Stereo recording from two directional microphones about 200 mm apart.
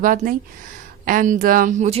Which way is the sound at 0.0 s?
40° right (ahead or behind).